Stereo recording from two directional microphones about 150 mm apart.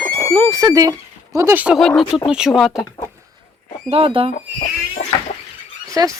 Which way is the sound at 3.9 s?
40° right (ahead or behind).